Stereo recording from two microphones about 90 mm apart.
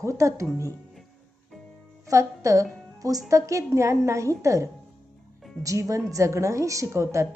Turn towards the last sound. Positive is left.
turn(degrees=-35)  # may be behind; listen again after turning